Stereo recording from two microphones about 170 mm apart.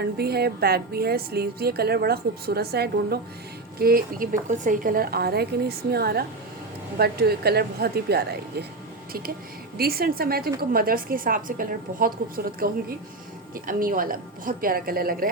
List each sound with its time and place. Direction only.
0.0 s a woman's voice: 70° right (ahead or behind)
9.7 s a woman's voice: 65° right (ahead or behind)